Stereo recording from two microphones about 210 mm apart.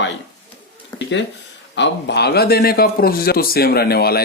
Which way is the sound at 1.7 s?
55° left (ahead or behind).